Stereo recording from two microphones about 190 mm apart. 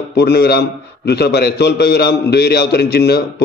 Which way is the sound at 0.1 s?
55° left (ahead or behind).